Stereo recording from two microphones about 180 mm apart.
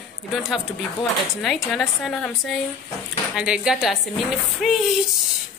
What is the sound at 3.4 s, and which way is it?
Speech, 5° right (ahead or behind).